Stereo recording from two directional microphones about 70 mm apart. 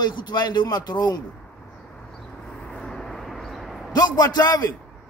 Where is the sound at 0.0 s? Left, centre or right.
Left.